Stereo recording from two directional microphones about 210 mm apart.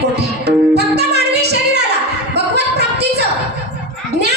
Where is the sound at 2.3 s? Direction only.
50° right (ahead or behind).